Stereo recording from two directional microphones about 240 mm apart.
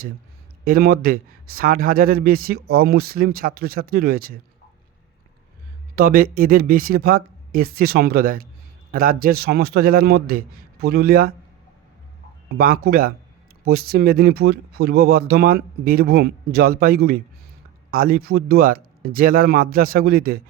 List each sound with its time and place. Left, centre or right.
0.6 s a man's voice: right
6.0 s a man's voice: right
12.5 s a man's voice: right